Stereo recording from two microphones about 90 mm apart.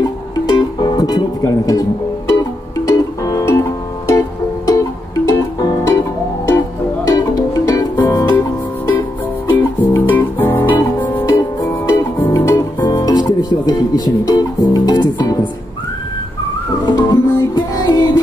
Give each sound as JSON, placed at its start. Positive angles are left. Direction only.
{"t": 0.0, "sound": "music", "side_deg": 50}
{"t": 5.9, "sound": "music", "side_deg": 30}
{"t": 9.5, "sound": "music", "side_deg": 25}
{"t": 11.2, "sound": "music", "side_deg": 35}
{"t": 12.8, "sound": "music", "side_deg": 45}
{"t": 16.8, "sound": "music", "side_deg": 50}